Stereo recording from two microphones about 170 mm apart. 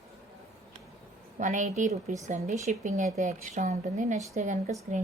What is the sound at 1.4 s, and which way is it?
A woman's voice, 45° right (ahead or behind).